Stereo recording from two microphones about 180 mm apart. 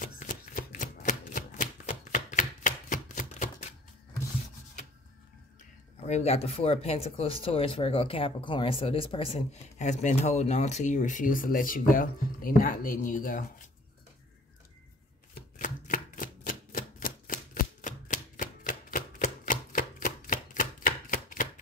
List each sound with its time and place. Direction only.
0.0 s shuffling cards: 45° left (ahead or behind)
6.0 s speech: 35° left (ahead or behind)
15.3 s a sound: 50° left (ahead or behind)